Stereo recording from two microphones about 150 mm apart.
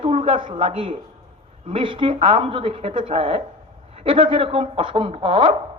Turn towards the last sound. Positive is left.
turn(degrees=-35)  # may be behind; listen again after turning